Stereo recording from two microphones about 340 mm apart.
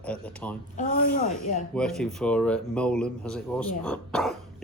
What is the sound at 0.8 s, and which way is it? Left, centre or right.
Speech, left.